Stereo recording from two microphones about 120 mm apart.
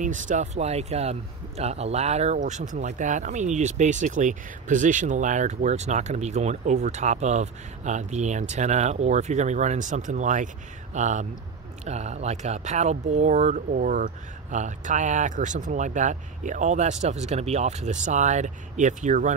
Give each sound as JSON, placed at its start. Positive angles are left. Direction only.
{"t": 0.0, "sound": "speech", "side_deg": -90}
{"t": 11.8, "sound": "speech", "side_deg": -70}